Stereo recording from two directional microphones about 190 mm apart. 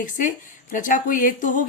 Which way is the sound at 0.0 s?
45° left (ahead or behind).